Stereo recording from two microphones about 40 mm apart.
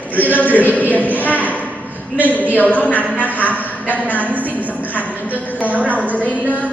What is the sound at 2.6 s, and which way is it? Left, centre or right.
A man's voice, left.